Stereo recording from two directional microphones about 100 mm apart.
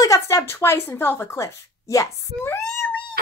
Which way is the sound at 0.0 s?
30° left (ahead or behind).